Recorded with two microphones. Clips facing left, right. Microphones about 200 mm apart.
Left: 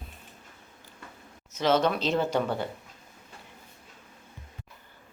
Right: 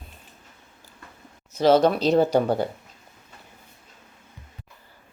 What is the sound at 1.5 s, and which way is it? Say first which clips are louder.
Speech: right 7 dB; 35° right (ahead or behind).